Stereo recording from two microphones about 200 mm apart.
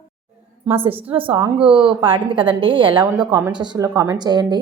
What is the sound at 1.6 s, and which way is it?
A woman's voice, 25° right (ahead or behind).